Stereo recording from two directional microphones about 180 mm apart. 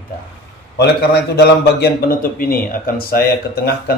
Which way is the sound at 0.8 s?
60° left (ahead or behind).